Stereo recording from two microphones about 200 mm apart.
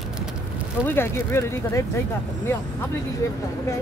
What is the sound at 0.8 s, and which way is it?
Speech, 10° left (ahead or behind).